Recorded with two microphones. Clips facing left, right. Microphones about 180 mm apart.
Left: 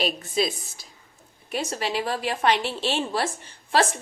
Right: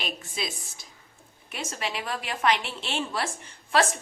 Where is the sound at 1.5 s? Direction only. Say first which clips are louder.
Left 6 dB; 35° left (ahead or behind).